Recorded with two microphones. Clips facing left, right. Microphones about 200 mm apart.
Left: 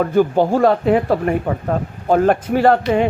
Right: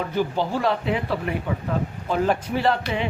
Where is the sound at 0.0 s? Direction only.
50° left (ahead or behind).